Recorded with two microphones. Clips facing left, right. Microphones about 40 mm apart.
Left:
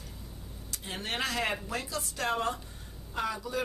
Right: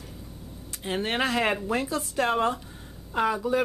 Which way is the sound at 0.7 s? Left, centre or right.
Right.